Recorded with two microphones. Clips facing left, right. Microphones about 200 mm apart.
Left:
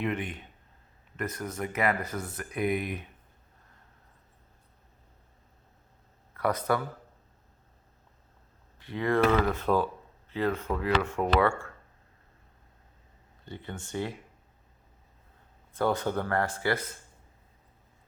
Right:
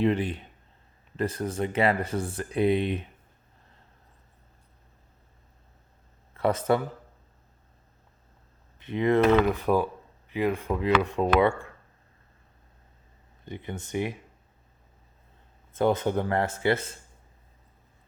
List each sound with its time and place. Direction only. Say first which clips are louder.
0.0 s speech: right 7 dB; 30° right (ahead or behind)
6.3 s speech: right 4 dB; 25° right (ahead or behind)
8.8 s speech: right 4 dB; 20° right (ahead or behind)
13.4 s speech: right 4 dB; 20° right (ahead or behind)
15.7 s speech: right 4 dB; 20° right (ahead or behind)